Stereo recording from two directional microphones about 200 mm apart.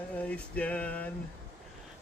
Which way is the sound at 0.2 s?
5° left (ahead or behind).